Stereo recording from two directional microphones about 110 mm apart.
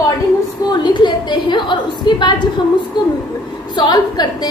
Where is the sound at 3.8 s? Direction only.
40° left (ahead or behind).